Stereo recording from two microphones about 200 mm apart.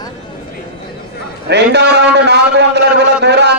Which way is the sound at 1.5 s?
55° right (ahead or behind).